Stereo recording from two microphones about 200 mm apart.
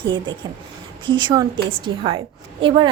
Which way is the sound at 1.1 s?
25° right (ahead or behind).